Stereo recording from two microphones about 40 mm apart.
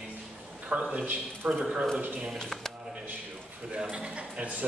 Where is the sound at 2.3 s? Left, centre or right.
Centre.